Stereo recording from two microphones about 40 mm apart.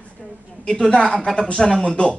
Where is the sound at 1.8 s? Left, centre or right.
Left.